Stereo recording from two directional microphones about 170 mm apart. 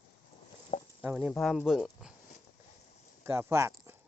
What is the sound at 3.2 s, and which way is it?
Speech, 15° right (ahead or behind).